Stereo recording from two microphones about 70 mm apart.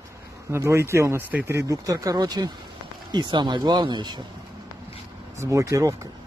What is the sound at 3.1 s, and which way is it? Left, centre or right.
Speech, right.